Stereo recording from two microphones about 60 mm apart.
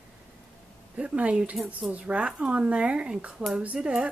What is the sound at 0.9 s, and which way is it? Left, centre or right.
A woman's voice, centre.